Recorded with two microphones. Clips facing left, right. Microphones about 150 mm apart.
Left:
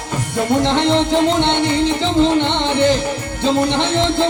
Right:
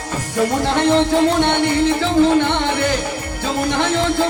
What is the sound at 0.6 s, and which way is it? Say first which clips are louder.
Music: even; 20° left (ahead or behind).